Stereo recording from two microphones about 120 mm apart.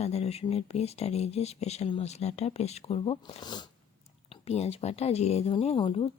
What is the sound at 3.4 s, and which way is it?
Speech, 35° left (ahead or behind).